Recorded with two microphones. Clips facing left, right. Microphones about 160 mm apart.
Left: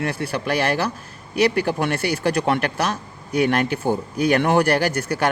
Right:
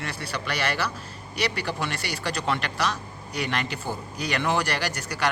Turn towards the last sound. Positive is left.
turn(degrees=55)  # may be behind; listen again after turning